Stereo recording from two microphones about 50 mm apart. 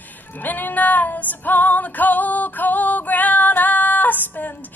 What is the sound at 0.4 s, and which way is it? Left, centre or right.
Female singing, left.